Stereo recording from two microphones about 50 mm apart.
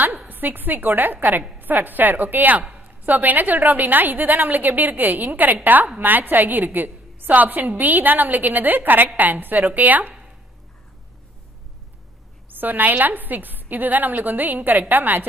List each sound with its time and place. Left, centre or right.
0.3 s a woman's voice: right
12.4 s a woman's voice: right